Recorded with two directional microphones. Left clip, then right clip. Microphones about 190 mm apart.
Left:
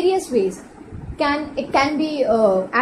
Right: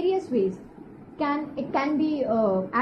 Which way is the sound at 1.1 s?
35° left (ahead or behind).